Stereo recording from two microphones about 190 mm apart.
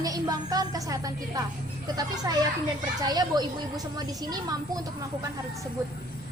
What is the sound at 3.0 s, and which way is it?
A woman's voice, 20° right (ahead or behind).